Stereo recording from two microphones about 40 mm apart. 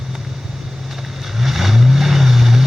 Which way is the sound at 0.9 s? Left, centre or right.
Centre.